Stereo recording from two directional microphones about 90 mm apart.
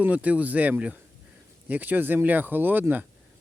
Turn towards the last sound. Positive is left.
turn(degrees=-20)  # may be behind; listen again after turning